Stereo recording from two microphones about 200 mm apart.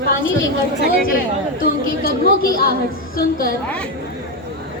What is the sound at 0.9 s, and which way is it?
A woman's voice, 45° left (ahead or behind).